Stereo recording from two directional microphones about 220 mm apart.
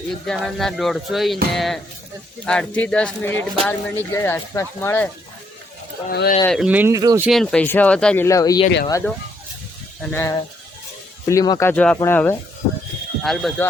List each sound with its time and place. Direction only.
0.3 s speech: centre (ahead or behind)
6.1 s speech: 45° left (ahead or behind)
6.4 s speech: centre (ahead or behind); by 7.2 s 15° right (ahead or behind)
7.3 s speech: 5° left (ahead or behind)